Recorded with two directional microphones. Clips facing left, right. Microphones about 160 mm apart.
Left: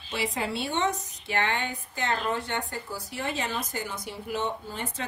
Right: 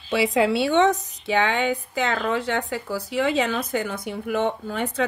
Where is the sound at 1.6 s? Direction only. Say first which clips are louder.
Right 9 dB; 90° right; by 4.8 s 60° right (ahead or behind).